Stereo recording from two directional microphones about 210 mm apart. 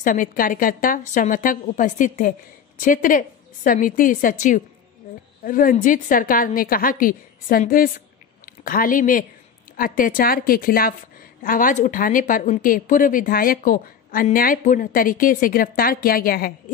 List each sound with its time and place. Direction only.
0.0 s a woman's voice: 40° left (ahead or behind)